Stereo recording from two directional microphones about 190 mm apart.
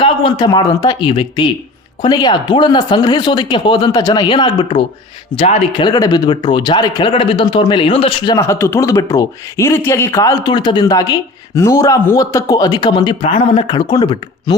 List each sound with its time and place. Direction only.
0.0 s a man's voice: 25° left (ahead or behind)
5.8 s speech: 20° left (ahead or behind)